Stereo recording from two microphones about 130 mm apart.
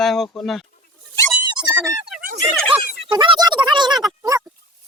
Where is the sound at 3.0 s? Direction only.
35° right (ahead or behind).